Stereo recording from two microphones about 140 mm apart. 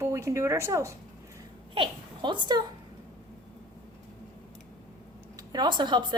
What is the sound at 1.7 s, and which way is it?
Speech, 35° right (ahead or behind).